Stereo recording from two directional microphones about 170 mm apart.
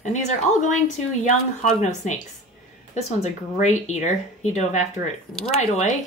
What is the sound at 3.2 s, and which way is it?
Speech, 40° left (ahead or behind).